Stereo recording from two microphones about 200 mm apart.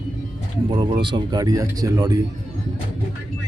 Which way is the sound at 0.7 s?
25° right (ahead or behind).